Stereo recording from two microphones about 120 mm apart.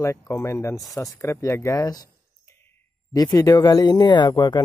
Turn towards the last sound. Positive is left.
turn(degrees=40)  # may be behind; listen again after turning